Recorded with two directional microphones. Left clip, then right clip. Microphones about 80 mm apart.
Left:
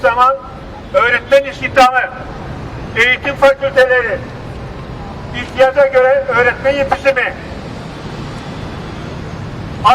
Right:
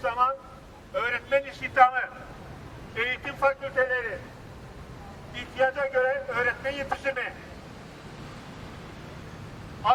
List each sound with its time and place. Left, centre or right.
0.0 s a man's voice: centre
5.3 s a man's voice: centre